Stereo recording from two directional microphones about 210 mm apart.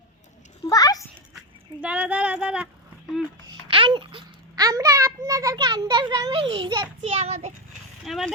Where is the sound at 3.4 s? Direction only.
25° right (ahead or behind).